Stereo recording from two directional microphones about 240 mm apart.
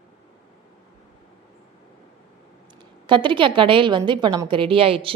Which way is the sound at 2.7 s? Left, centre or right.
Centre.